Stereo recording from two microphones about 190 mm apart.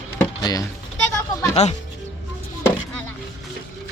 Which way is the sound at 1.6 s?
35° left (ahead or behind).